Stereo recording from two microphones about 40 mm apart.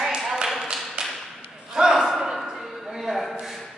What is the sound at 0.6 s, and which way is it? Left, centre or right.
Tap, centre.